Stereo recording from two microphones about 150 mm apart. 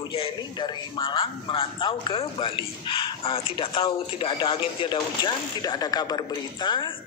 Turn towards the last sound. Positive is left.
turn(degrees=30)  # may be behind; listen again after turning